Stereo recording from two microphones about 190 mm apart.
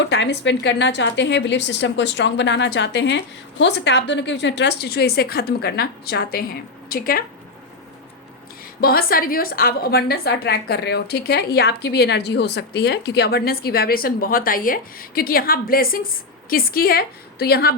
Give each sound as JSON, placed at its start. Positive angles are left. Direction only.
{"t": 0.0, "sound": "a woman's voice", "side_deg": 65}
{"t": 8.8, "sound": "a woman's voice", "side_deg": 50}